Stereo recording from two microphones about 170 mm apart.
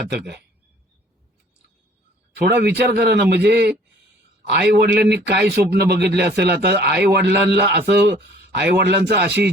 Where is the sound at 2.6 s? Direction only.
80° right.